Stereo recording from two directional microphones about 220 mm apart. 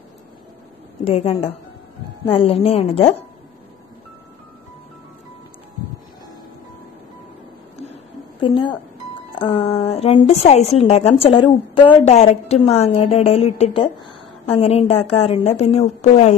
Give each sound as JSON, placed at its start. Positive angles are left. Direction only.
{"t": 1.0, "sound": "a woman's voice", "side_deg": 25}
{"t": 7.8, "sound": "a sound", "side_deg": 25}
{"t": 9.4, "sound": "a woman's voice", "side_deg": 25}